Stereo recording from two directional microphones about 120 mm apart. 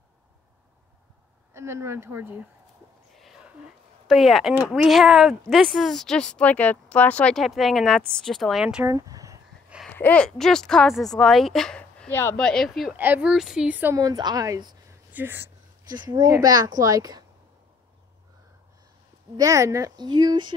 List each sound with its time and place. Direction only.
1.5 s a woman's voice: 20° right (ahead or behind)
4.1 s speech: centre (ahead or behind)
8.8 s a sound: 30° right (ahead or behind)
9.8 s speech: 10° left (ahead or behind)
12.1 s speech: 20° left (ahead or behind)
12.4 s speech: 5° left (ahead or behind)
12.9 s speech: 15° right (ahead or behind)
13.9 s speech: 35° right (ahead or behind)
14.9 s a sound: 20° right (ahead or behind)
16.0 s speech: 40° right (ahead or behind)
19.3 s speech: 25° right (ahead or behind)